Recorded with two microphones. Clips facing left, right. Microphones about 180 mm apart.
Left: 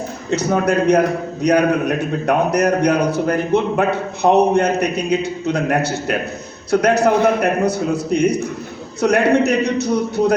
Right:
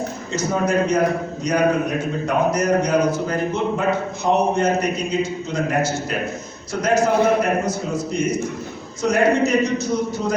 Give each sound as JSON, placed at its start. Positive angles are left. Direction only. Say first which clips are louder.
{"t": 0.3, "sound": "a man's voice", "louder": "left 5 dB", "side_deg": 65}